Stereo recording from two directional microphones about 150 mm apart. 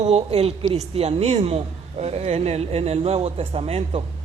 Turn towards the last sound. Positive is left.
turn(degrees=-40)  # may be behind; listen again after turning